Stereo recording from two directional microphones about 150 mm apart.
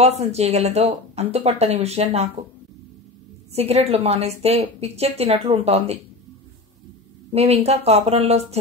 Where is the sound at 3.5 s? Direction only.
45° right (ahead or behind).